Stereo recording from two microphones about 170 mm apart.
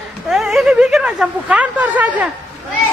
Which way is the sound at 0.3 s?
Centre (ahead or behind).